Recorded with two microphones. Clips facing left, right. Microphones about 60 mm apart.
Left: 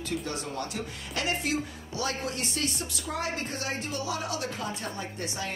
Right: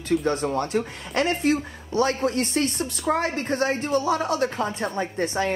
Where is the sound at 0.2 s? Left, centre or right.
Right.